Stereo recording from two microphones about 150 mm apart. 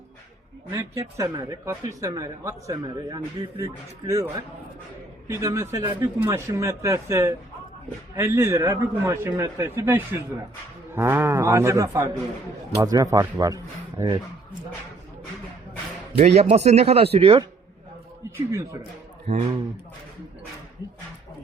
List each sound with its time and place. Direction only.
0.7 s a man's voice: 20° right (ahead or behind)
16.1 s speech: 45° right (ahead or behind)
18.3 s speech: 20° right (ahead or behind)
19.3 s speech: 45° right (ahead or behind)